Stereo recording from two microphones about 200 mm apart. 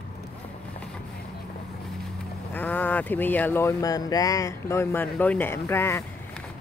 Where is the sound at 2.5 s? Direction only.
10° left (ahead or behind).